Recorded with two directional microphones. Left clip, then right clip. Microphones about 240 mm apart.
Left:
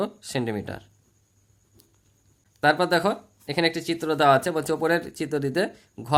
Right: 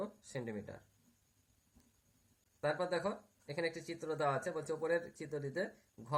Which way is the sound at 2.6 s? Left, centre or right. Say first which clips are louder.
Left 16 dB; left.